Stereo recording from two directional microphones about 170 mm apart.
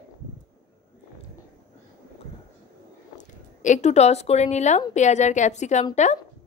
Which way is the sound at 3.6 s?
45° left (ahead or behind).